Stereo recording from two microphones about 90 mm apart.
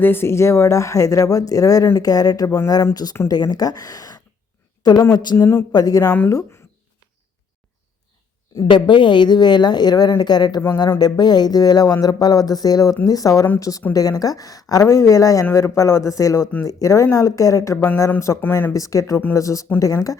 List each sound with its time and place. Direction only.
0.0 s a woman's voice: 25° left (ahead or behind); by 5.4 s 50° left (ahead or behind)
5.4 s speech: 30° left (ahead or behind)
5.7 s a woman's voice: 45° left (ahead or behind)
6.2 s speech: 30° left (ahead or behind)
8.7 s a woman's voice: 60° left (ahead or behind); by 20.1 s 40° left (ahead or behind)